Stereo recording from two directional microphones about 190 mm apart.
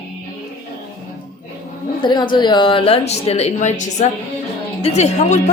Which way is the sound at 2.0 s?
25° left (ahead or behind).